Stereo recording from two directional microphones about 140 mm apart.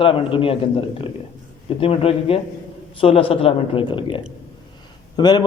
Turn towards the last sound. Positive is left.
turn(degrees=30)  # may be behind; listen again after turning